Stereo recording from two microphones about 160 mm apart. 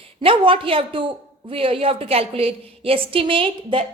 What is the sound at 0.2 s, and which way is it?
A woman's voice, 35° right (ahead or behind).